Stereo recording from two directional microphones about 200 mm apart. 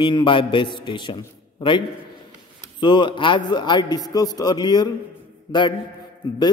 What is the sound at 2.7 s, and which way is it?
A man's voice, 20° left (ahead or behind).